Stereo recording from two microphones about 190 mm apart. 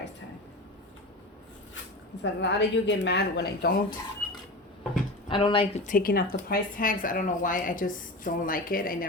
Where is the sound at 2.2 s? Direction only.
65° left (ahead or behind).